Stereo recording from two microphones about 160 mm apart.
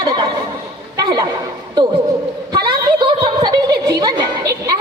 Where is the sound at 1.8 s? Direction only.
30° right (ahead or behind).